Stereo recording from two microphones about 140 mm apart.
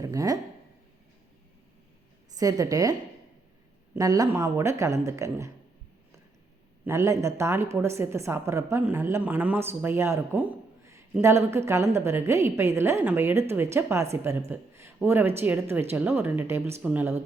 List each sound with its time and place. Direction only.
0.0 s speech: 25° right (ahead or behind)
2.3 s a woman's voice: 25° right (ahead or behind)
3.9 s a woman's voice: 25° right (ahead or behind)
6.8 s a woman's voice: 20° right (ahead or behind)